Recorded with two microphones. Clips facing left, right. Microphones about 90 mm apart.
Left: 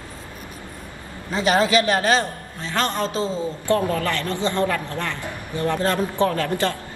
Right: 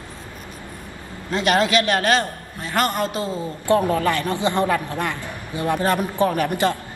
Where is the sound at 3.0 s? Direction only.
25° left (ahead or behind).